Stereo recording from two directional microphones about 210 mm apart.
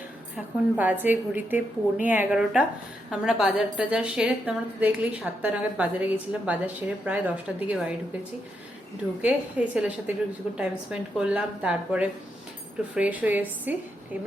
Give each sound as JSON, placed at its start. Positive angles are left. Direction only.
{"t": 0.3, "sound": "a woman's voice", "side_deg": -10}
{"t": 9.2, "sound": "a woman's voice", "side_deg": -5}